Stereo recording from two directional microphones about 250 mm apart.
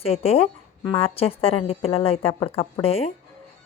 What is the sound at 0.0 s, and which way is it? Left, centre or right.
A woman's voice, left.